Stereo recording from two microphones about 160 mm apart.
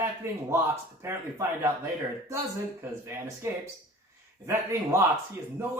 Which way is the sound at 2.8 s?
15° right (ahead or behind).